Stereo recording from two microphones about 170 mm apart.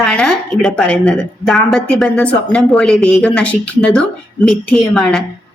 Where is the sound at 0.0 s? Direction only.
5° left (ahead or behind).